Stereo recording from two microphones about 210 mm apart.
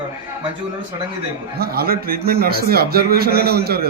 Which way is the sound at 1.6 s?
45° right (ahead or behind).